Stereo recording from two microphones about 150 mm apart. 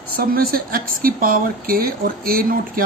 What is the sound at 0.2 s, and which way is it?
Speech, 75° right (ahead or behind).